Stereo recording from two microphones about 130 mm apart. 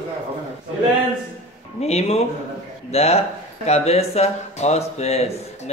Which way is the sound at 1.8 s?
55° left (ahead or behind).